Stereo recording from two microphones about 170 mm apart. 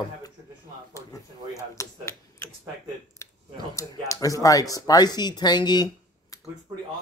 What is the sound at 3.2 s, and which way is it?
Speech, 20° left (ahead or behind).